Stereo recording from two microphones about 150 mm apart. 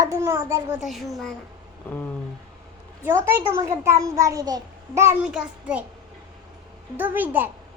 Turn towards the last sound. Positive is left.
turn(degrees=-15)  # may be behind; listen again after turning